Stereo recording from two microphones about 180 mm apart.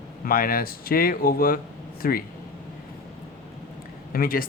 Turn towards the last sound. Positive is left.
turn(degrees=55)  # may be behind; listen again after turning